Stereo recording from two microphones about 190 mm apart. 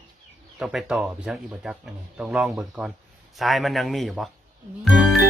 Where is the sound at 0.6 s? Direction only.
5° right (ahead or behind).